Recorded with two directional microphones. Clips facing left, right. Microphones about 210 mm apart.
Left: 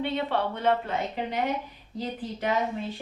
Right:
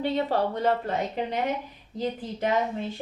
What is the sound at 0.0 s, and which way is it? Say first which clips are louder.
Speech: right 2 dB; 40° right (ahead or behind).